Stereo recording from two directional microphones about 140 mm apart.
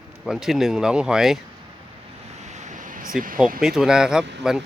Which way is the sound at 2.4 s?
55° right (ahead or behind).